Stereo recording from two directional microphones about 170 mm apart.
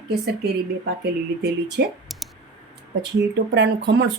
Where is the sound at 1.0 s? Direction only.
70° right (ahead or behind).